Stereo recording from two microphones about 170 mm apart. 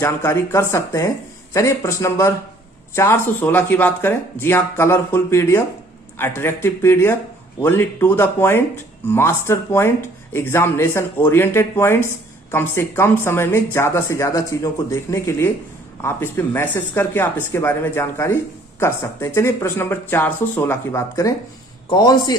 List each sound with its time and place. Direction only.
0.0 s a man's voice: 15° left (ahead or behind)